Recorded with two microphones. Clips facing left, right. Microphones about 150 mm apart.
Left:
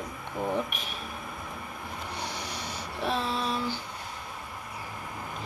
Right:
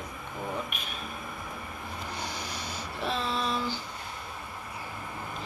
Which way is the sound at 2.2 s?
65° left (ahead or behind).